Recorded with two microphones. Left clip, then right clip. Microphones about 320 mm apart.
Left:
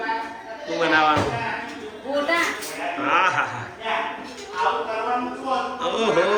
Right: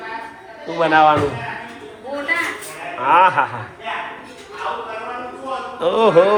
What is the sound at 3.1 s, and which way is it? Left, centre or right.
Quack, centre.